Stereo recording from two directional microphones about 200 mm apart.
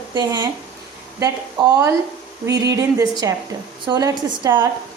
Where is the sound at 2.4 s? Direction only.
15° right (ahead or behind).